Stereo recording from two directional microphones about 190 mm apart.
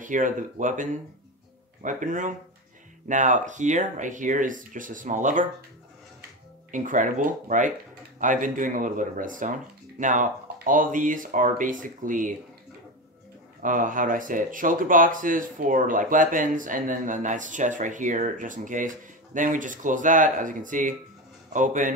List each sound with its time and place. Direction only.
0.0 s speech: 45° right (ahead or behind)
6.7 s speech: 45° right (ahead or behind)
13.6 s speech: 45° right (ahead or behind)